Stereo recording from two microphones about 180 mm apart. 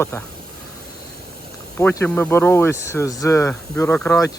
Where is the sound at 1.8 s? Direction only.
10° left (ahead or behind).